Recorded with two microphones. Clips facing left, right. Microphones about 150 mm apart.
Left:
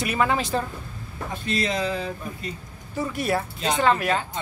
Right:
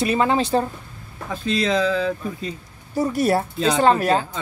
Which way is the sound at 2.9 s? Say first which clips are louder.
Right 6 dB; 40° right (ahead or behind).